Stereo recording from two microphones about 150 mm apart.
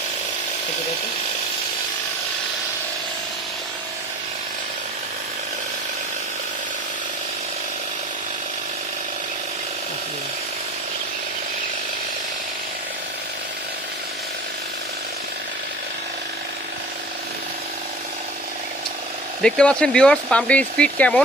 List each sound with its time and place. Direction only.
19.4 s speech: 5° left (ahead or behind)